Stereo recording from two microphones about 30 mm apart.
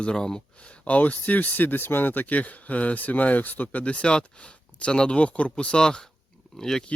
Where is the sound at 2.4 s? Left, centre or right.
Left.